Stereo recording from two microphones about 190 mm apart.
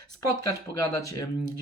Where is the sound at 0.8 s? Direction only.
15° left (ahead or behind).